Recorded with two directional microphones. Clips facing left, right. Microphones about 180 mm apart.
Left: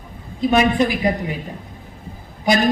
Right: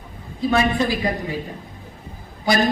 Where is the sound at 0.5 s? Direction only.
20° left (ahead or behind).